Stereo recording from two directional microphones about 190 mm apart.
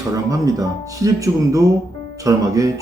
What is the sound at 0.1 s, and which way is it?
Speech, 15° right (ahead or behind).